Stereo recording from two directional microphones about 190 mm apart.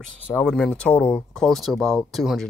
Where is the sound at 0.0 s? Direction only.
5° left (ahead or behind).